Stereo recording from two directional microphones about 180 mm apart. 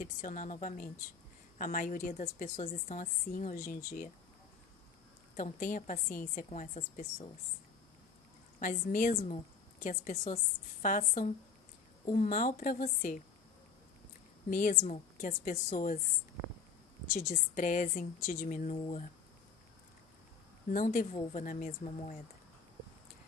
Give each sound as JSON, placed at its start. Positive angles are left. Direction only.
{"t": 0.0, "sound": "a woman's voice", "side_deg": 45}
{"t": 5.3, "sound": "a woman's voice", "side_deg": 45}
{"t": 8.5, "sound": "a woman's voice", "side_deg": 45}
{"t": 14.5, "sound": "a woman's voice", "side_deg": 45}
{"t": 17.3, "sound": "a woman's voice", "side_deg": 45}
{"t": 18.8, "sound": "speech", "side_deg": 35}
{"t": 20.6, "sound": "a woman's voice", "side_deg": 45}